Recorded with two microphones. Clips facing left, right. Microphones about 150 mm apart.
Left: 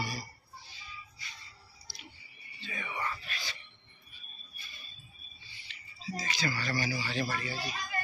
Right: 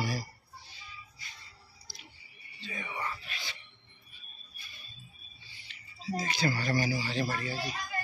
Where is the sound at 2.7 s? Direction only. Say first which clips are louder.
Left 1 dB; 20° right (ahead or behind).